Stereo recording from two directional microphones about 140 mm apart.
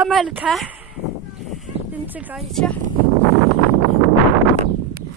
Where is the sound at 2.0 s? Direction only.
10° right (ahead or behind).